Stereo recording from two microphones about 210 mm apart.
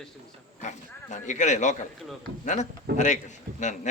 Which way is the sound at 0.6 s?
35° left (ahead or behind).